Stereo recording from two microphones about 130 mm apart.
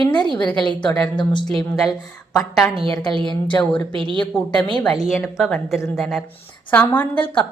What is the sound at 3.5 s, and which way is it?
A woman's voice, 10° left (ahead or behind).